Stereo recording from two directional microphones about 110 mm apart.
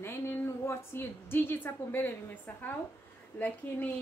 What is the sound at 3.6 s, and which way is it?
Speech, 15° left (ahead or behind).